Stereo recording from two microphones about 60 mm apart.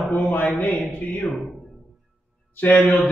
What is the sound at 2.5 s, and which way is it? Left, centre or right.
Speech, left.